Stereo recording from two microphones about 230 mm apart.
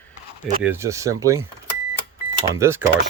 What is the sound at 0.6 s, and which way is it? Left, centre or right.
Speech, centre.